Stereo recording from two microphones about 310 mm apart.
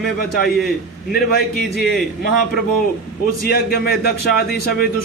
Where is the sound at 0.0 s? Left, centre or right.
Left.